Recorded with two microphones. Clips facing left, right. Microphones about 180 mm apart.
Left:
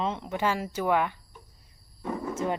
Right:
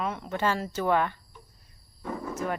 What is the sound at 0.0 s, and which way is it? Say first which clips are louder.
Speech: even; 20° left (ahead or behind).